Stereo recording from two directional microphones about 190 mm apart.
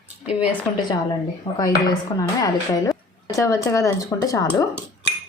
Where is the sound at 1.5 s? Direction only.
20° left (ahead or behind).